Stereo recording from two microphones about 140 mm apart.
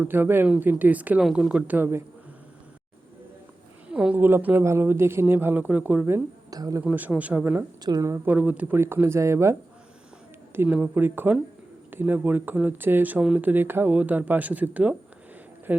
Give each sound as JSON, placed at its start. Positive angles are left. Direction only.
{"t": 0.0, "sound": "speech", "side_deg": -15}
{"t": 3.8, "sound": "speech", "side_deg": -5}
{"t": 6.5, "sound": "speech", "side_deg": -25}
{"t": 6.8, "sound": "speech", "side_deg": -10}
{"t": 7.9, "sound": "speech", "side_deg": -25}